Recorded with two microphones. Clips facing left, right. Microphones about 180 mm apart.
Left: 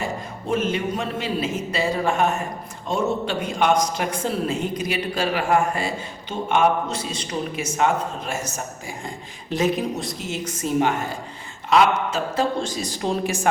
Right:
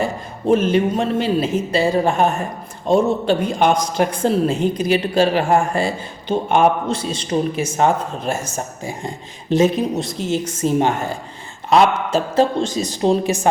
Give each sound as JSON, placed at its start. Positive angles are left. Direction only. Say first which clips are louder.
{"t": 0.0, "sound": "a man's voice", "louder": "right 7 dB", "side_deg": -30}
{"t": 12.1, "sound": "a man's voice", "louder": "right 6 dB", "side_deg": -25}